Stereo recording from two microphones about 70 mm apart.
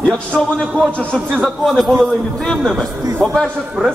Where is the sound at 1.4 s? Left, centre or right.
Centre.